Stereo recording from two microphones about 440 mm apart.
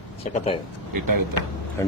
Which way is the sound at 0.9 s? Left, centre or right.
Right.